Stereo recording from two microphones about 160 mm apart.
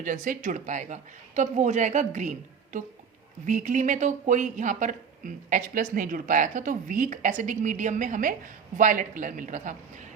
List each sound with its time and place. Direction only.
0.0 s speech: 55° right (ahead or behind)
3.4 s speech: 50° right (ahead or behind)